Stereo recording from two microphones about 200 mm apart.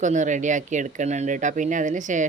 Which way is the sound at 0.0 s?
40° right (ahead or behind).